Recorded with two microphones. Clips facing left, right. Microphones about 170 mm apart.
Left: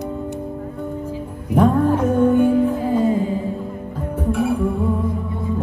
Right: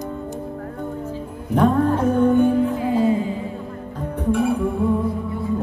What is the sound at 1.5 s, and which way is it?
Music, 5° left (ahead or behind).